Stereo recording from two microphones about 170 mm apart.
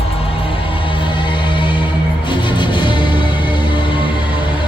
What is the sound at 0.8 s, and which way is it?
Music, 30° left (ahead or behind).